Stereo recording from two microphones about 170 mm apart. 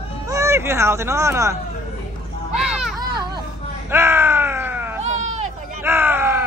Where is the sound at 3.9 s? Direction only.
15° right (ahead or behind).